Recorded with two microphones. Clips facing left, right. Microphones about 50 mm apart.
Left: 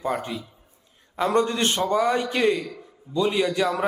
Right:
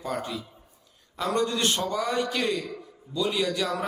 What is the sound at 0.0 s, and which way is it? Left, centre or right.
A man's voice, left.